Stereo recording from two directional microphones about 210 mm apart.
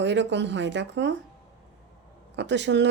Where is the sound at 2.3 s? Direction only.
55° right (ahead or behind).